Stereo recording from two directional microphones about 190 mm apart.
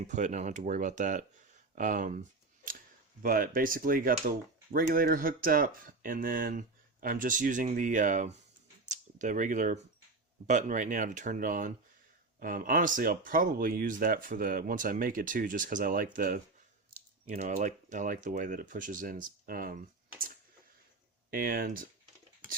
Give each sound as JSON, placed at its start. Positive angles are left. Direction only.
{"t": 0.0, "sound": "speech", "side_deg": -40}
{"t": 3.2, "sound": "speech", "side_deg": -50}
{"t": 21.2, "sound": "speech", "side_deg": -50}